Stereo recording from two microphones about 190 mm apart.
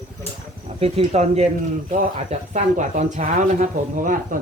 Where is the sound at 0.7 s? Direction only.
30° right (ahead or behind).